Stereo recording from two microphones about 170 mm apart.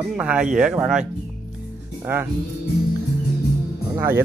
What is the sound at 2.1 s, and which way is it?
Speech, 10° right (ahead or behind).